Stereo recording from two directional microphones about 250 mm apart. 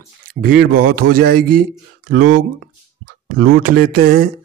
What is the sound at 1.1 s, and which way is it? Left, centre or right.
Speech, right.